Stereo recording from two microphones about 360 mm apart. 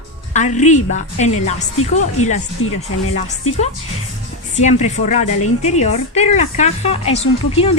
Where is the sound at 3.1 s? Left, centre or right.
Centre.